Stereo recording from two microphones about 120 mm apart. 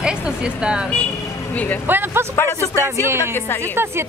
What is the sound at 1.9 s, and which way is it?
Speech, 15° right (ahead or behind).